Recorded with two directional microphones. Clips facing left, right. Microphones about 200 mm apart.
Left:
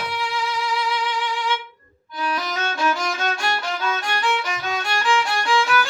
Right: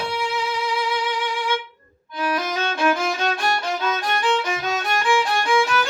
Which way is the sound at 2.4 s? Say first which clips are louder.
Right 2 dB; 25° right (ahead or behind).